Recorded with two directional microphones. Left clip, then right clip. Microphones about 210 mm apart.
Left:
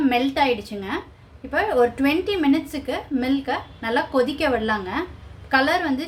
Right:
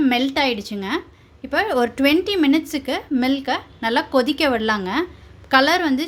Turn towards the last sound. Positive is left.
turn(degrees=-45)  # may be behind; listen again after turning